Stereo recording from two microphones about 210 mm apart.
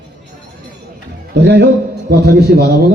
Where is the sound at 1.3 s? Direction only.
55° right (ahead or behind).